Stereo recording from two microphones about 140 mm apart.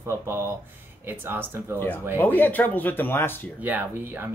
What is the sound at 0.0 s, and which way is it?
Speech, 15° right (ahead or behind).